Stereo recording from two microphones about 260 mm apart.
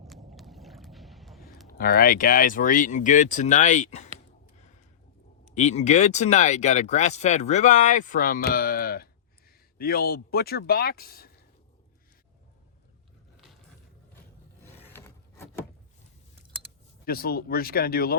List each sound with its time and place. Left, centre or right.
0.1 s boat: centre
1.8 s speech: left
5.5 s speech: left
14.6 s wood: centre
17.1 s speech: left